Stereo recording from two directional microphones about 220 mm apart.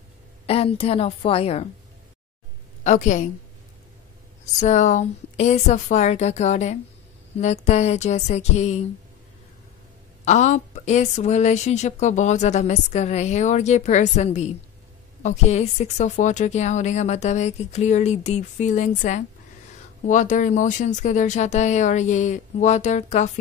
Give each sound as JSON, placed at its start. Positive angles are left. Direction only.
{"t": 0.5, "sound": "a woman's voice", "side_deg": 25}
{"t": 2.8, "sound": "a woman's voice", "side_deg": 35}
{"t": 4.6, "sound": "a woman's voice", "side_deg": 35}
{"t": 10.2, "sound": "a woman's voice", "side_deg": 30}